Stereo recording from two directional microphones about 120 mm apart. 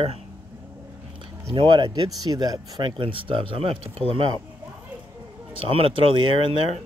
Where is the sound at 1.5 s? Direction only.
40° right (ahead or behind).